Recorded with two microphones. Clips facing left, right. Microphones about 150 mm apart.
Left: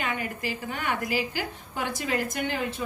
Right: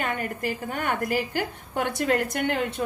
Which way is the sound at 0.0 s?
50° right (ahead or behind).